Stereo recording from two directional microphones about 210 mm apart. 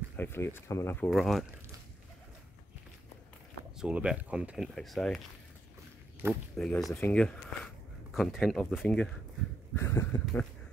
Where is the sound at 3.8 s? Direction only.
5° right (ahead or behind).